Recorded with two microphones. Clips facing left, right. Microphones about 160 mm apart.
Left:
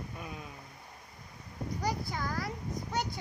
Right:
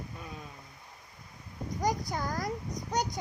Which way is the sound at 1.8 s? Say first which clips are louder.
Right 4 dB; 45° right (ahead or behind).